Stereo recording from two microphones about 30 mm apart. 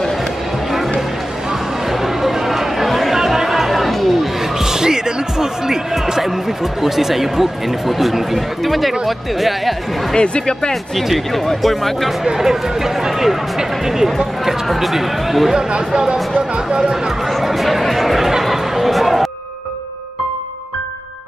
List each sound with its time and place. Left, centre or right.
1.9 s a sound: centre
3.2 s chatter: centre
4.6 s music: centre
6.6 s speech: centre
10.1 s speech: left
11.6 s speech: centre
12.4 s speech: centre
14.7 s speech: centre
16.5 s speech: right
17.3 s speech: centre
18.4 s chatter: centre